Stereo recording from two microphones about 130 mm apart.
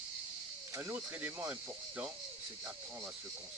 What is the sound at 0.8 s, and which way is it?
Speech, 15° right (ahead or behind).